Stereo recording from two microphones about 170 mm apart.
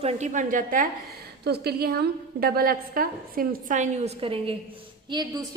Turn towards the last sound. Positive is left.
turn(degrees=-25)  # may be behind; listen again after turning